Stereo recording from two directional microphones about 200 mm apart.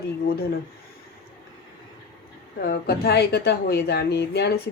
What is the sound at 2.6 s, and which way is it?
A woman's voice, 55° left (ahead or behind).